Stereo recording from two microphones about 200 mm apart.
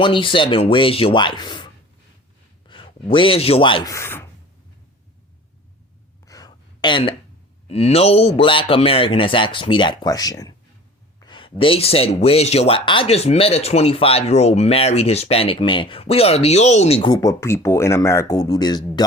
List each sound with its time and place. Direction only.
0.0 s a man's voice: 25° left (ahead or behind)
3.9 s speech: 10° left (ahead or behind)
6.2 s a sound: 20° left (ahead or behind)
7.7 s a man's voice: 30° left (ahead or behind)